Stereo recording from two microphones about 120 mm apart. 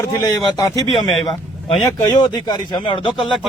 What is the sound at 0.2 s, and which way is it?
Speech, 30° left (ahead or behind).